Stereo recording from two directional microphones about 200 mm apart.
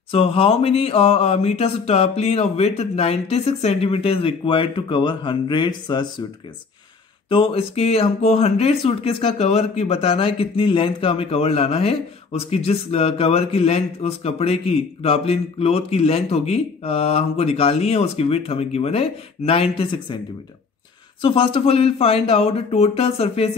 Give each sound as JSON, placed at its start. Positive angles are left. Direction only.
{"t": 0.1, "sound": "speech", "side_deg": 25}
{"t": 7.2, "sound": "speech", "side_deg": 25}
{"t": 21.2, "sound": "speech", "side_deg": 25}